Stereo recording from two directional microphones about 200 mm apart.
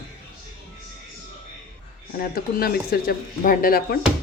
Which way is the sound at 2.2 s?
50° left (ahead or behind).